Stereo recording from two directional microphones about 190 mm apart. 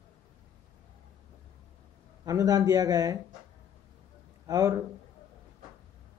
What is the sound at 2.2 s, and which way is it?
Speech, 20° right (ahead or behind).